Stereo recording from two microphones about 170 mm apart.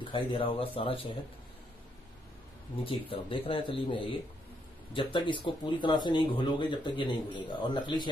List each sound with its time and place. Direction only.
0.0 s speech: 30° left (ahead or behind)
2.8 s speech: 30° left (ahead or behind)